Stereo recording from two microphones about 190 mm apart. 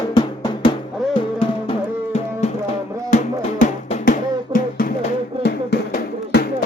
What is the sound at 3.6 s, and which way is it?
Drum, 45° left (ahead or behind).